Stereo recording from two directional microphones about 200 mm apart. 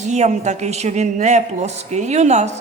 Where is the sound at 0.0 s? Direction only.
35° right (ahead or behind).